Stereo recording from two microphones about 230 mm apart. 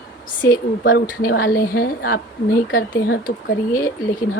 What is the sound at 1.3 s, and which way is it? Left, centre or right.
A woman's voice, left.